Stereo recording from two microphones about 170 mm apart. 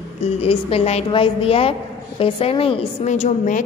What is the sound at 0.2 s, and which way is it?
A woman's voice, 35° left (ahead or behind).